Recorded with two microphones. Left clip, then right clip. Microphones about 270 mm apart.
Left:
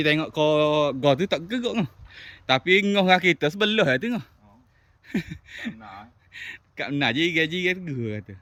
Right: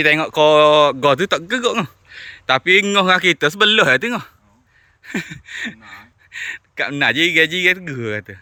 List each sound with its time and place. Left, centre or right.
0.0 s speech: centre